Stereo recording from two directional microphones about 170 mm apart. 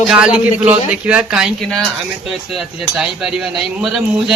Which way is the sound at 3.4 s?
5° right (ahead or behind).